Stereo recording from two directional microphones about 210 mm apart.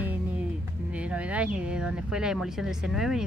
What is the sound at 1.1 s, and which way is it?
Speech, 5° right (ahead or behind).